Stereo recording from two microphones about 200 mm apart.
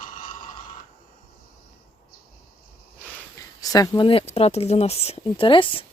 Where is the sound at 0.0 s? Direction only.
45° left (ahead or behind).